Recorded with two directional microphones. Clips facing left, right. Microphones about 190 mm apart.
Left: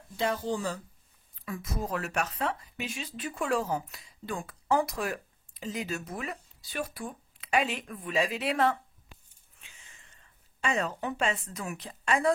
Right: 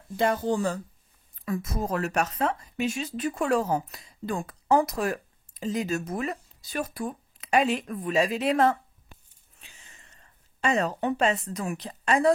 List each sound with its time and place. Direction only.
0.2 s a woman's voice: 50° right (ahead or behind)